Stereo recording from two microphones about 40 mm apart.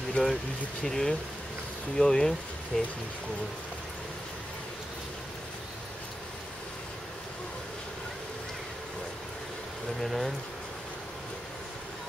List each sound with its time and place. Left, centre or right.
0.2 s speech: left
0.8 s speech: centre
10.0 s speech: centre